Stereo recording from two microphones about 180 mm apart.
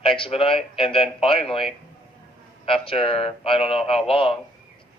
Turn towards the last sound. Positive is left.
turn(degrees=30)  # may be behind; listen again after turning